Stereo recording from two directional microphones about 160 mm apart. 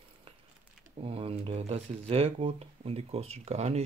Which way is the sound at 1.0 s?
35° right (ahead or behind).